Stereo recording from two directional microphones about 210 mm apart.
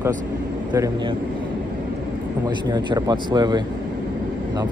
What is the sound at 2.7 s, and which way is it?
Speech, 20° right (ahead or behind).